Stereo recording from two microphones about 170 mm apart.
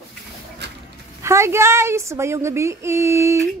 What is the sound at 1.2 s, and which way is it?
Speech, 15° right (ahead or behind).